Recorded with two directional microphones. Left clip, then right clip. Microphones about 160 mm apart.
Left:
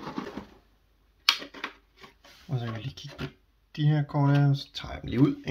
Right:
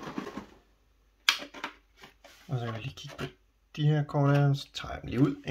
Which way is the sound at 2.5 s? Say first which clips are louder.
Even; 10° right (ahead or behind).